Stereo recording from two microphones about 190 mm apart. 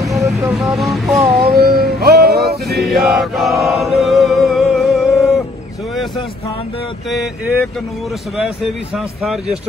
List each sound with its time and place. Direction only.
0.0 s vehicle: centre (ahead or behind)
1.6 s music: 55° right (ahead or behind)
2.9 s chant: centre (ahead or behind)
8.9 s vehicle: centre (ahead or behind)